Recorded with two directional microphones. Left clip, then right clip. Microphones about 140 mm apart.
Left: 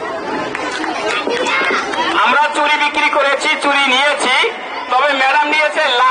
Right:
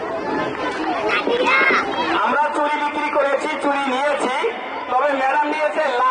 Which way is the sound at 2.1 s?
15° right (ahead or behind).